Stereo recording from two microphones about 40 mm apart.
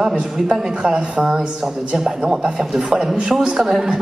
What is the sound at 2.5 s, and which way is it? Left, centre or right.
A woman's voice, centre.